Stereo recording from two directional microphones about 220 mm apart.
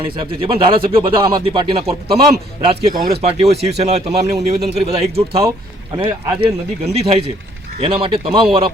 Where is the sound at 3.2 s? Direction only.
30° right (ahead or behind).